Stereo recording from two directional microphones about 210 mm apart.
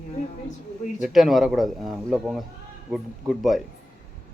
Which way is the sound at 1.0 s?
Centre (ahead or behind).